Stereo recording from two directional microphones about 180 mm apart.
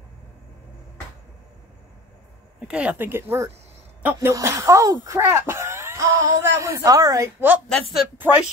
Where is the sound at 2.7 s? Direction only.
5° right (ahead or behind).